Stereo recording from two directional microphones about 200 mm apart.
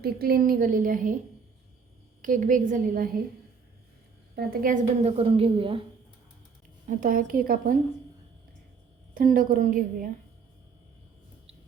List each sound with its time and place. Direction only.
0.0 s a woman's voice: 50° right (ahead or behind)
2.2 s a woman's voice: 40° right (ahead or behind)
4.4 s a woman's voice: 40° right (ahead or behind); by 5.8 s 25° right (ahead or behind)
6.8 s a woman's voice: 40° right (ahead or behind)
9.1 s a woman's voice: 45° right (ahead or behind)